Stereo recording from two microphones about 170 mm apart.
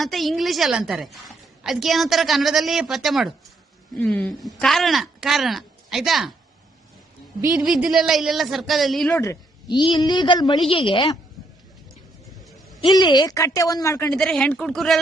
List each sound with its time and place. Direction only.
0.0 s a woman's voice: centre (ahead or behind)
7.5 s a woman's voice: centre (ahead or behind)
9.2 s a woman's voice: 20° left (ahead or behind)
12.5 s a sound: centre (ahead or behind)
12.9 s a woman's voice: 25° left (ahead or behind)
14.1 s a woman's voice: 5° left (ahead or behind)